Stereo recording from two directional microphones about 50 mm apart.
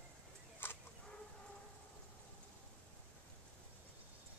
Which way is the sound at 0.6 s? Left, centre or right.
Left.